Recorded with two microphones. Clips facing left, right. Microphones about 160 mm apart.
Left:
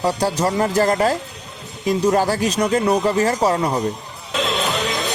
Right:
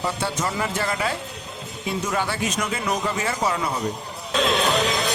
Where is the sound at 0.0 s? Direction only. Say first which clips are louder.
Left 7 dB; 35° left (ahead or behind).